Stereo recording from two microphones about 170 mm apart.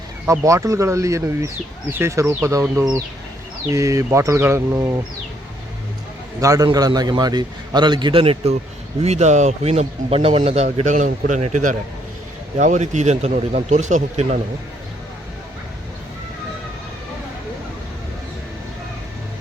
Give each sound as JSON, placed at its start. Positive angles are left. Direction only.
{"t": 0.3, "sound": "speech", "side_deg": -20}
{"t": 6.4, "sound": "a man's voice", "side_deg": -20}